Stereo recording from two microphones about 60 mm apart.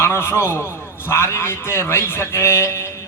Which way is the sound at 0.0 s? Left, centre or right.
Left.